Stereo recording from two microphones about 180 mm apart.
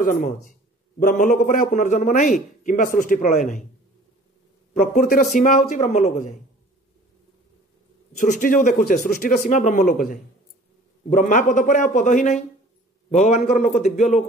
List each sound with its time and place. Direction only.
0.0 s a man's voice: 45° left (ahead or behind)
5.3 s speech: 45° left (ahead or behind)
8.2 s a man's voice: 50° left (ahead or behind)